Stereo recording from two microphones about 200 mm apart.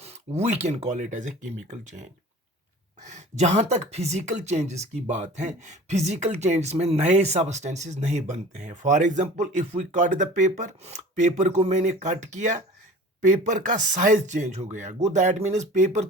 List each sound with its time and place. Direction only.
0.0 s speech: 35° right (ahead or behind)